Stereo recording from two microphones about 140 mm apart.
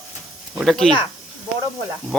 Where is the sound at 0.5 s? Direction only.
Centre (ahead or behind).